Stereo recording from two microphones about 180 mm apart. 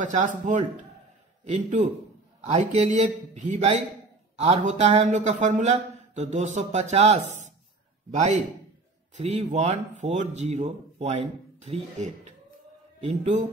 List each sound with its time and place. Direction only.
0.0 s a man's voice: 45° right (ahead or behind)